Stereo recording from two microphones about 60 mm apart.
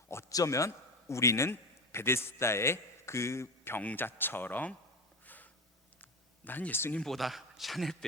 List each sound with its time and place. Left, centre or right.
0.3 s a man's voice: left
3.8 s speech: left
5.2 s snort: left
6.0 s a sound: left
7.0 s a man's voice: centre